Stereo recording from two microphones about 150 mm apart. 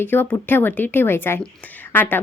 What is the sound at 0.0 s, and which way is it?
Speech, 15° left (ahead or behind).